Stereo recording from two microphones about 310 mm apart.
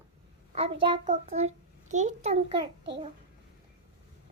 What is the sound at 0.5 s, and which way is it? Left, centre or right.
A child's voice, centre.